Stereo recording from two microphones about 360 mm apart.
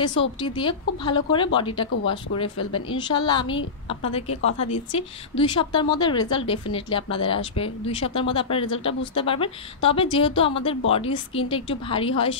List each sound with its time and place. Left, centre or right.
0.4 s speech: centre
4.3 s a woman's voice: left
4.9 s speech: centre